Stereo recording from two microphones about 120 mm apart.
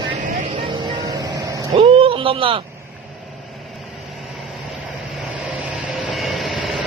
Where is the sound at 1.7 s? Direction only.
50° right (ahead or behind).